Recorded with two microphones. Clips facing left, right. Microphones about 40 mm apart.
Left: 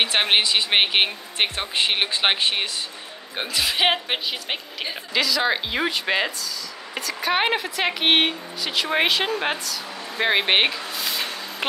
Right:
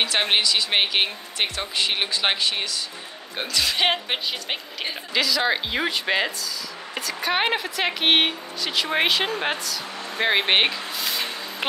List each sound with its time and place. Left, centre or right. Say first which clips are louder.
0.0 s speech: left 2 dB; left
3.3 s a woman's voice: left 1 dB; centre